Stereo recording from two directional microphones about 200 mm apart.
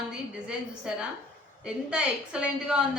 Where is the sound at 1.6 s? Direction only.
5° right (ahead or behind).